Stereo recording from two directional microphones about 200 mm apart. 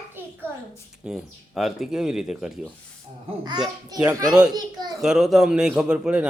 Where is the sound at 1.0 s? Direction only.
Centre (ahead or behind).